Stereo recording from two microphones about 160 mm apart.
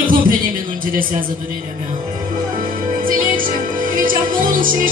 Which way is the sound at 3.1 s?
60° right (ahead or behind).